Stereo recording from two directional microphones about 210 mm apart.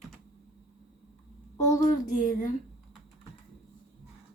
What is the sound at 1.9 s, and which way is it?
Speech, 40° left (ahead or behind).